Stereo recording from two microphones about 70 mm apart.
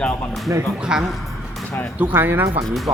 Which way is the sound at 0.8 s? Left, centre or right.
Centre.